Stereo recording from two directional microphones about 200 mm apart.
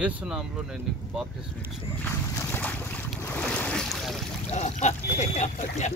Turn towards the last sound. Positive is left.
turn(degrees=35)  # may be behind; listen again after turning